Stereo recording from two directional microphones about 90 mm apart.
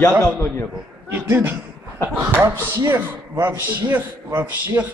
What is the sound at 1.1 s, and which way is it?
A man's voice, 20° right (ahead or behind).